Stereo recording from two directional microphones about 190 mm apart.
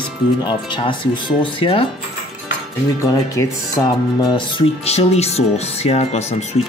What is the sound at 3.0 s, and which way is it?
Speech, 15° left (ahead or behind).